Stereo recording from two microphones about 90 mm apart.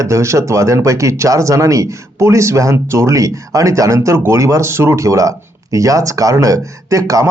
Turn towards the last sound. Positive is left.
turn(degrees=-40)  # may be behind; listen again after turning